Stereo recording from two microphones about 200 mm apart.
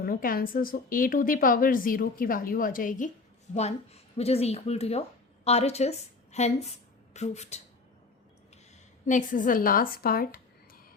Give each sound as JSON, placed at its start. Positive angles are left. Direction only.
{"t": 0.0, "sound": "a woman's voice", "side_deg": 45}
{"t": 3.5, "sound": "a woman's voice", "side_deg": 35}
{"t": 9.0, "sound": "speech", "side_deg": 40}